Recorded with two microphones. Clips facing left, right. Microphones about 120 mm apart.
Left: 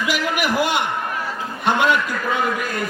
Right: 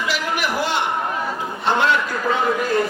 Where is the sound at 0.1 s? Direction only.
15° left (ahead or behind).